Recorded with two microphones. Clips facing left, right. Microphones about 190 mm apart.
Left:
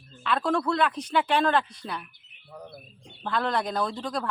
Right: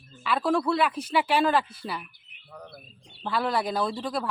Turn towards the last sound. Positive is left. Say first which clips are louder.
# right 1 dB
turn(degrees=-5)  # may be behind; listen again after turning